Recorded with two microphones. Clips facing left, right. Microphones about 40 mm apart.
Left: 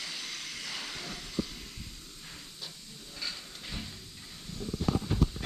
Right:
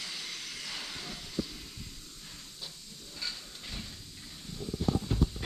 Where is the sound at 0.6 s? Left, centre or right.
Centre.